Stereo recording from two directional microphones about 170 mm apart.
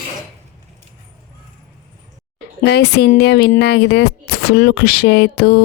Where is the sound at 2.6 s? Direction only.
90° left.